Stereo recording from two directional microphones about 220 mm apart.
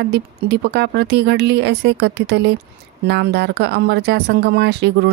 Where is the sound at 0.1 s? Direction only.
50° right (ahead or behind).